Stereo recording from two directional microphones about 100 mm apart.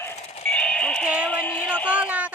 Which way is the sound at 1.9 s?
15° right (ahead or behind).